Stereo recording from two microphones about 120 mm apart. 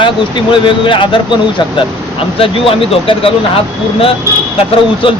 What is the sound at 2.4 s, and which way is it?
Speech, 50° left (ahead or behind).